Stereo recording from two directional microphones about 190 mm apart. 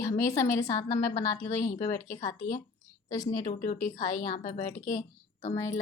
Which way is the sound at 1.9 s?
15° left (ahead or behind).